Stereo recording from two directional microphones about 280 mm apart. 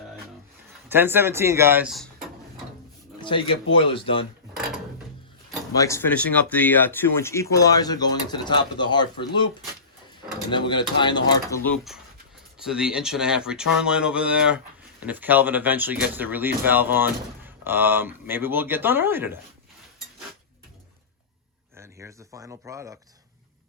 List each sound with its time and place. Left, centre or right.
0.9 s speech: centre
3.2 s a sound: centre
3.8 s speech: centre
5.7 s speech: centre
10.5 s speech: centre
21.8 s speech: centre